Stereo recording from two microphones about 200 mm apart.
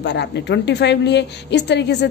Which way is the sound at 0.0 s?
60° left (ahead or behind).